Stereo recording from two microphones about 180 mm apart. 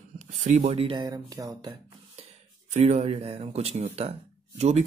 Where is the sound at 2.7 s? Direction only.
40° right (ahead or behind).